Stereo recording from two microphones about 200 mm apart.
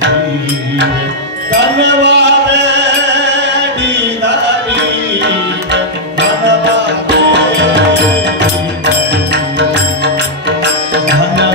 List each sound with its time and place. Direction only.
1.6 s chant: 60° right (ahead or behind)
7.1 s music: 60° right (ahead or behind)
9.3 s music: 60° right (ahead or behind)